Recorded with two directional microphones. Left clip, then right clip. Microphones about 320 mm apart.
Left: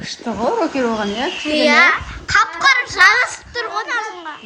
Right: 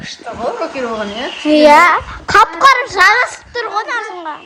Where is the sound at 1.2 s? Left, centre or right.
Centre.